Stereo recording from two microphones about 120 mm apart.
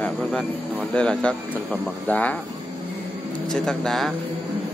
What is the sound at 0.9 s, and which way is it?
Speech, 10° left (ahead or behind).